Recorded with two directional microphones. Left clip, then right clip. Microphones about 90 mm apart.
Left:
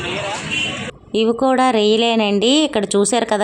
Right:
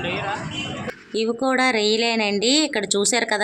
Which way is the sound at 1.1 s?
40° left (ahead or behind).